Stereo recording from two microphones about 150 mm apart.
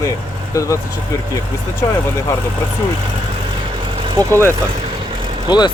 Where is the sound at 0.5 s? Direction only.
20° left (ahead or behind).